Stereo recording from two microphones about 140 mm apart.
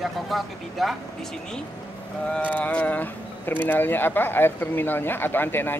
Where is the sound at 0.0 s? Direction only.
Centre (ahead or behind).